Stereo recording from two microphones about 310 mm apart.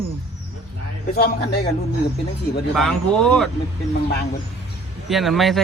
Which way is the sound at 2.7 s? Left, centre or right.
Centre.